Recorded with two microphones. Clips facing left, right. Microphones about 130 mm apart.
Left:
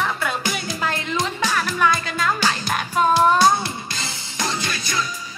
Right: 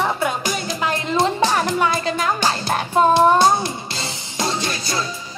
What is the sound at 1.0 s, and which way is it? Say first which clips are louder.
Music: right 6 dB; 30° right (ahead or behind).